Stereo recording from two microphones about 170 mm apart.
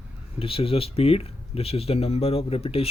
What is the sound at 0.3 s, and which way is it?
Speech, 35° left (ahead or behind).